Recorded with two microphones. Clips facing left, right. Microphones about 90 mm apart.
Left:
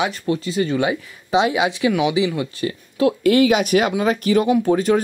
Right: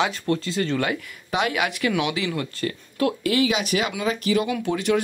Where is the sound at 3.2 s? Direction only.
45° left (ahead or behind).